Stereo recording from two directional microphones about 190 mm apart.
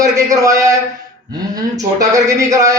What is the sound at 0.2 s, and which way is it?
A man's voice, 15° right (ahead or behind).